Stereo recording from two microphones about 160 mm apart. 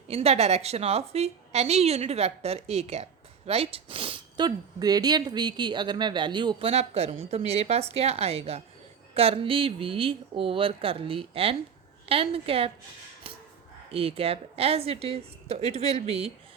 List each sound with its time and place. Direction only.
0.1 s a woman's voice: 40° right (ahead or behind)
13.9 s a woman's voice: 35° right (ahead or behind)